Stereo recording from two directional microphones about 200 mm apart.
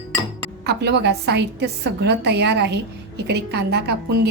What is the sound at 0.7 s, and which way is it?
A woman's voice, 55° right (ahead or behind).